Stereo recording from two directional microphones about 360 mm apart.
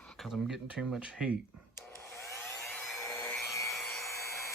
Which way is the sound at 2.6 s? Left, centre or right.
Centre.